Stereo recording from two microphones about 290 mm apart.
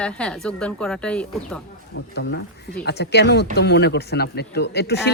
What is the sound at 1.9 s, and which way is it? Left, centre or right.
Speech, left.